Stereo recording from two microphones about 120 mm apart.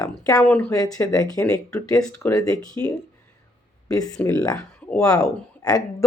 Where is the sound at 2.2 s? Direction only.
15° left (ahead or behind).